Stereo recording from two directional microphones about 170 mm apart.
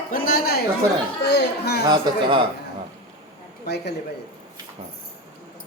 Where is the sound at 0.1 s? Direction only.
60° left (ahead or behind).